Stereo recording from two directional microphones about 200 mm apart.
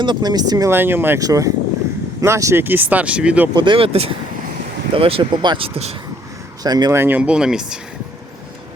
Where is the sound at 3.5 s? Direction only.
25° right (ahead or behind); by 7.8 s 5° right (ahead or behind).